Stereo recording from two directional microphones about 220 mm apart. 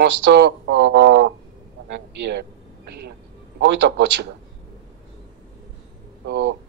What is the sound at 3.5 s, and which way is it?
Speech, 55° right (ahead or behind).